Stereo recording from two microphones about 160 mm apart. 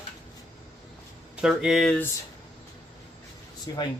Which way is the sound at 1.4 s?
5° right (ahead or behind).